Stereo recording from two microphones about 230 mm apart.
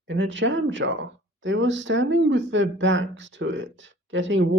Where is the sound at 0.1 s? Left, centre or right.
Right.